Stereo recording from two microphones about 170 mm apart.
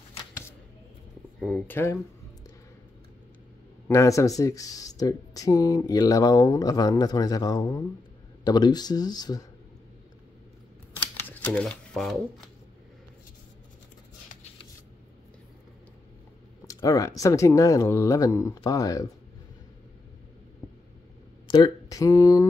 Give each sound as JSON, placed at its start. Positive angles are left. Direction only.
{"t": 1.4, "sound": "speech", "side_deg": 10}
{"t": 3.8, "sound": "speech", "side_deg": 15}
{"t": 11.2, "sound": "speech", "side_deg": 10}
{"t": 16.6, "sound": "speech", "side_deg": 20}
{"t": 21.5, "sound": "speech", "side_deg": 25}